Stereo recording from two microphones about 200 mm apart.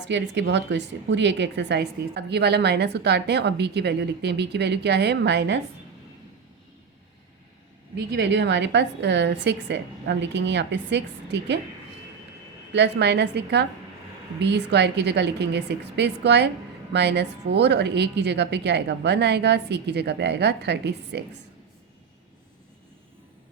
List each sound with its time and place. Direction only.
0.1 s a woman's voice: 60° right (ahead or behind)
7.9 s a woman's voice: 60° right (ahead or behind)
12.7 s a woman's voice: 60° right (ahead or behind)